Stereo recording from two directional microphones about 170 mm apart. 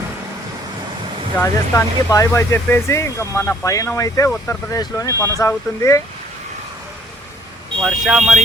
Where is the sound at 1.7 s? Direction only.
15° left (ahead or behind).